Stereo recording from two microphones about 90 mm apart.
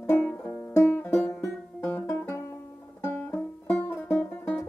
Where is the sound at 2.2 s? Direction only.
30° left (ahead or behind).